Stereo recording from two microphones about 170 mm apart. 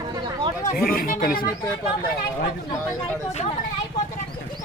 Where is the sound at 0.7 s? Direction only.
60° left (ahead or behind).